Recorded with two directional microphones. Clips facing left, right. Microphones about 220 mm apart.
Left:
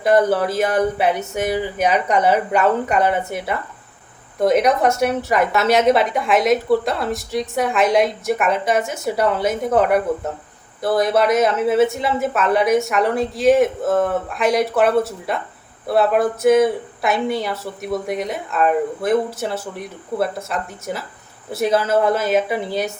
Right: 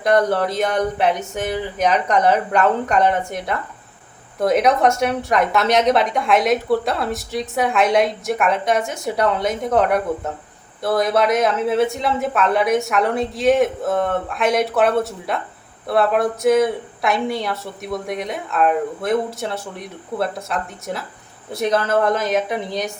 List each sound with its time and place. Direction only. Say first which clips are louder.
0.0 s a woman's voice: left 1 dB; 5° left (ahead or behind)